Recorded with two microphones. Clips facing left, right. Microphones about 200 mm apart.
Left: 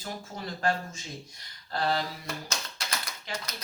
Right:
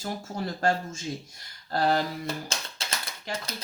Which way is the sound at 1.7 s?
45° right (ahead or behind).